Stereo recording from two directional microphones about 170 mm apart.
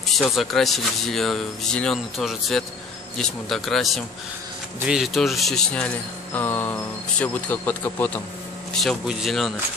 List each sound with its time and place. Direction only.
0.0 s speech: centre (ahead or behind)
8.7 s speech: centre (ahead or behind)